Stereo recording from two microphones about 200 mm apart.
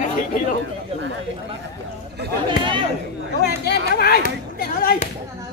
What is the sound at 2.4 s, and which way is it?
Speech, 25° right (ahead or behind).